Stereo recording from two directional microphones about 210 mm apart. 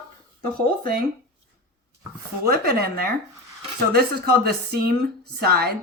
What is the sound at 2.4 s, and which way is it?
Speech, 45° right (ahead or behind).